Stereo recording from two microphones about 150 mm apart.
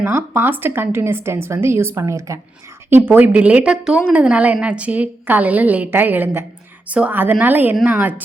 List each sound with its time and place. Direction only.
0.0 s a woman's voice: 15° right (ahead or behind)